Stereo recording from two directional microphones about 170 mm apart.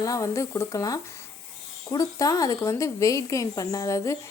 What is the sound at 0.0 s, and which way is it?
A woman's voice, 20° left (ahead or behind).